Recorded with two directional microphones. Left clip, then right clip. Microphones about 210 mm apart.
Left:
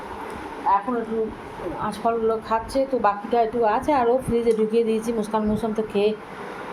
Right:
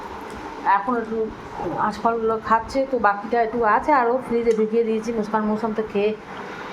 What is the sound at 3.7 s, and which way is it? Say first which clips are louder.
Speech: right 3 dB; 15° right (ahead or behind).